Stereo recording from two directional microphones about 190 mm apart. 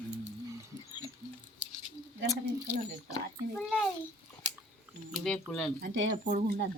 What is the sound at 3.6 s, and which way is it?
Speech, 5° left (ahead or behind).